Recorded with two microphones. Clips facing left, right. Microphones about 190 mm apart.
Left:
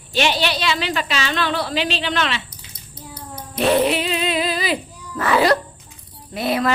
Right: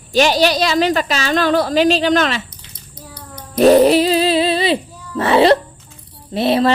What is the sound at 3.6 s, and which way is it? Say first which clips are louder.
Music: right 8 dB; 40° right (ahead or behind).